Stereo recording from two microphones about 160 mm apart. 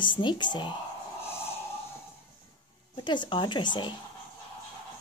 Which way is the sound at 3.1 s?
30° left (ahead or behind).